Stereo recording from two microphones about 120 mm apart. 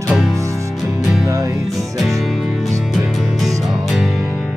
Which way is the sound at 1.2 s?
30° right (ahead or behind).